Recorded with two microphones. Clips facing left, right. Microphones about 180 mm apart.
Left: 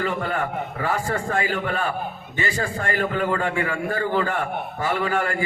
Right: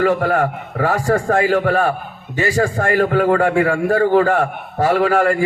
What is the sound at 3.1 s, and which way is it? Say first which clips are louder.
A man's voice: right 9 dB; 75° right (ahead or behind).